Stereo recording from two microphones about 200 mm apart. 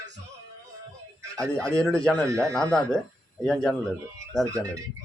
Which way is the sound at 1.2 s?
15° right (ahead or behind).